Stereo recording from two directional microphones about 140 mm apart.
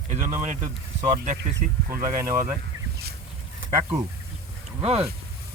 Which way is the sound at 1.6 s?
60° right (ahead or behind).